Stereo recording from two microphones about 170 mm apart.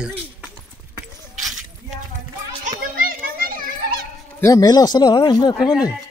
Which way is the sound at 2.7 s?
55° right (ahead or behind).